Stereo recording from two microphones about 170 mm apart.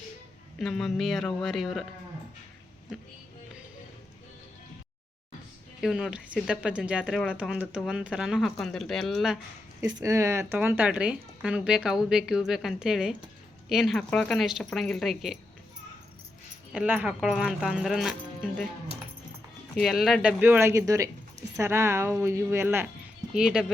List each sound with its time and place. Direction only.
0.6 s speech: centre (ahead or behind)
5.8 s speech: 5° right (ahead or behind)
9.8 s speech: 20° right (ahead or behind); by 15.4 s centre (ahead or behind)
16.7 s speech: 10° right (ahead or behind)
19.7 s speech: centre (ahead or behind)
20.4 s speech: 15° right (ahead or behind)